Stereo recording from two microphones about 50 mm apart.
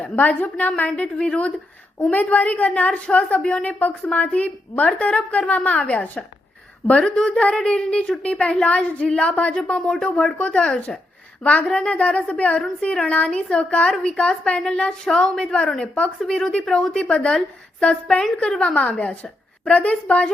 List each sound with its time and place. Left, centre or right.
0.0 s a woman's voice: left